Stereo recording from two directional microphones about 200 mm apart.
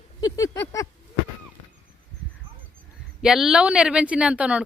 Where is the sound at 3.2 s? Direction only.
Centre (ahead or behind).